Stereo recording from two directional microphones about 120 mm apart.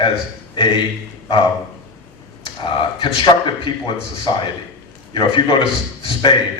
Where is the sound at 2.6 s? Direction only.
45° left (ahead or behind).